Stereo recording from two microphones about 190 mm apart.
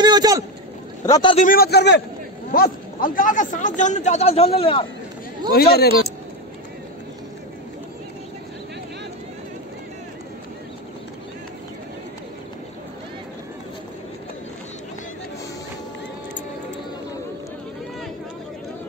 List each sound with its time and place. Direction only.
0.0 s rowboat: 20° right (ahead or behind)
1.0 s a man's voice: 20° left (ahead or behind)
1.3 s a man's voice: 45° left (ahead or behind)
2.5 s a man's voice: 50° left (ahead or behind); by 4.8 s 30° left (ahead or behind)
5.5 s speech: 55° left (ahead or behind)